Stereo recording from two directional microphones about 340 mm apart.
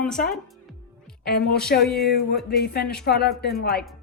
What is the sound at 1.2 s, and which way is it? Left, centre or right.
A woman's voice, left.